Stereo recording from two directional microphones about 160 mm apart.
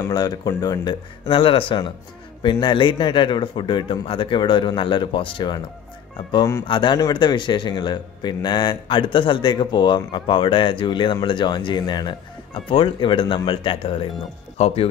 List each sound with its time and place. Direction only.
0.0 s a man's voice: 25° left (ahead or behind); by 14.7 s 40° left (ahead or behind)